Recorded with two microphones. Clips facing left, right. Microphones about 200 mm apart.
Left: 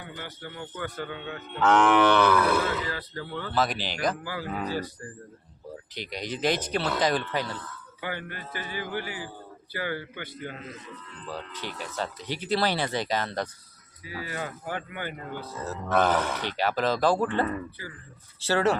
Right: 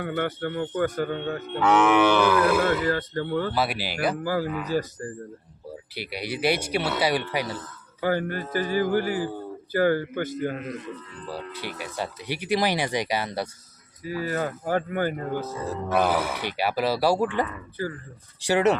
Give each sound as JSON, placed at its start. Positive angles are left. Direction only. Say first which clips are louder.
{"t": 0.0, "sound": "speech", "louder": "right 13 dB", "side_deg": -65}
{"t": 1.5, "sound": "livestock", "louder": "right 1 dB", "side_deg": -10}
{"t": 2.8, "sound": "speech", "louder": "right 9 dB", "side_deg": -50}
{"t": 3.5, "sound": "speech", "louder": "right 1 dB", "side_deg": -10}
{"t": 4.2, "sound": "speech", "louder": "right 6 dB", "side_deg": -45}
{"t": 5.9, "sound": "speech", "louder": "right 2 dB", "side_deg": -10}
{"t": 7.5, "sound": "speech", "louder": "right 3 dB", "side_deg": -40}
{"t": 11.8, "sound": "speech", "louder": "even", "side_deg": -10}
{"t": 14.0, "sound": "speech", "louder": "right 8 dB", "side_deg": -45}
{"t": 15.5, "sound": "speech", "louder": "left 1 dB", "side_deg": -10}
{"t": 17.8, "sound": "speech", "louder": "right 12 dB", "side_deg": -40}
{"t": 18.4, "sound": "speech", "louder": "right 3 dB", "side_deg": -20}